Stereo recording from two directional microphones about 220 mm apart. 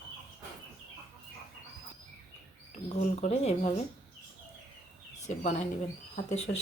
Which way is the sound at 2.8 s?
30° left (ahead or behind).